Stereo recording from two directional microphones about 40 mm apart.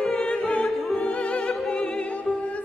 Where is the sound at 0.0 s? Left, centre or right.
Centre.